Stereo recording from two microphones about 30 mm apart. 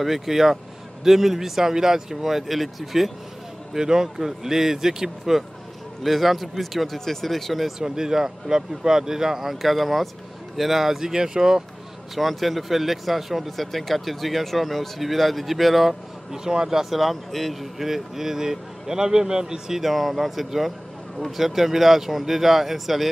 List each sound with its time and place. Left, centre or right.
0.0 s speech: centre
3.7 s speech: right
6.0 s speech: centre
7.8 s speech: centre
9.6 s speech: centre; by 11.6 s right
12.2 s speech: centre
16.3 s speech: centre
17.0 s speech: centre
17.6 s speech: centre; by 19.6 s right
19.7 s speech: centre